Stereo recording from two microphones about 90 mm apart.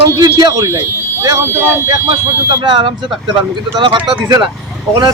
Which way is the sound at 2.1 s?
60° right (ahead or behind).